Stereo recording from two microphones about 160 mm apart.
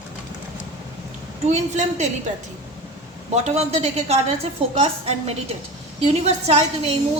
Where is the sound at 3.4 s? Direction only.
45° right (ahead or behind).